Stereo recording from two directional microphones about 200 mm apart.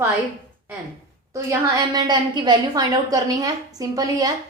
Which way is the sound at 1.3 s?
15° right (ahead or behind).